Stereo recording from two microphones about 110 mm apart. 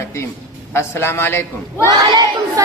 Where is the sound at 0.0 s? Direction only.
25° left (ahead or behind).